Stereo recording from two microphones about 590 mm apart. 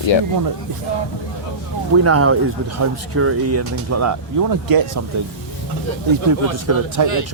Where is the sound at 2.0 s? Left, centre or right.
Right.